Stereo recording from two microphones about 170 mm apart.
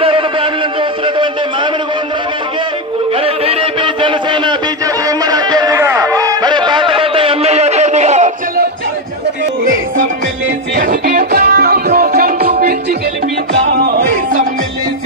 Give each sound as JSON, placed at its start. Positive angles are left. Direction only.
{"t": 0.0, "sound": "music", "side_deg": -30}
{"t": 1.0, "sound": "a sound", "side_deg": -30}
{"t": 3.2, "sound": "music", "side_deg": -35}
{"t": 10.8, "sound": "music", "side_deg": -50}